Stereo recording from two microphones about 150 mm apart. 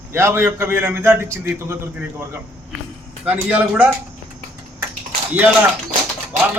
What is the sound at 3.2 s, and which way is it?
Speech, 10° right (ahead or behind).